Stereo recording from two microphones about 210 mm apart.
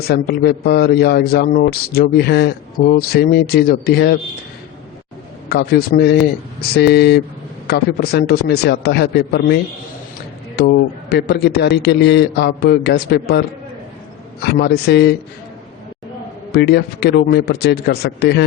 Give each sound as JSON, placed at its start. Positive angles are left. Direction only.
{"t": 0.1, "sound": "a man's voice", "side_deg": 50}
{"t": 5.5, "sound": "a man's voice", "side_deg": 50}
{"t": 10.6, "sound": "a man's voice", "side_deg": 50}
{"t": 14.4, "sound": "a man's voice", "side_deg": 55}
{"t": 16.5, "sound": "a man's voice", "side_deg": 50}